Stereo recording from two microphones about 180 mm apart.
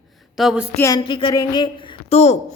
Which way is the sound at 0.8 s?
20° left (ahead or behind).